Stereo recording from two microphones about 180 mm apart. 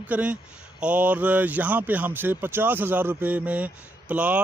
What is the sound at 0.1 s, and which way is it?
Speech, 5° right (ahead or behind).